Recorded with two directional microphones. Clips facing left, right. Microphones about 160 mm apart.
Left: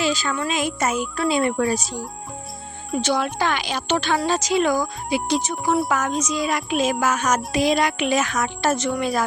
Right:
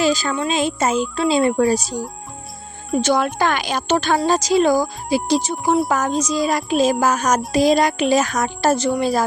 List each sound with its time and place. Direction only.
0.0 s speech: 40° right (ahead or behind)
3.0 s a woman's voice: 50° right (ahead or behind)